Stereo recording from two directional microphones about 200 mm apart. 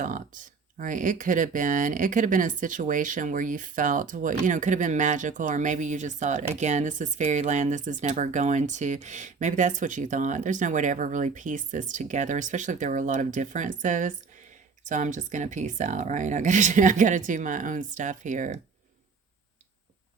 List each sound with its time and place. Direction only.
0.0 s speech: 40° right (ahead or behind)